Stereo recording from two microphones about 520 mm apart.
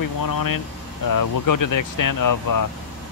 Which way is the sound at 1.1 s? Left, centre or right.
Left.